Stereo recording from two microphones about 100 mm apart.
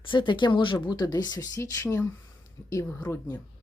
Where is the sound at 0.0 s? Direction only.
55° left (ahead or behind); by 3.4 s 25° left (ahead or behind).